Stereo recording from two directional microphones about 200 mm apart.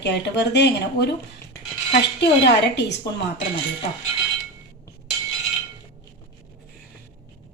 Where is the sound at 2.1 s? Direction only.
55° left (ahead or behind).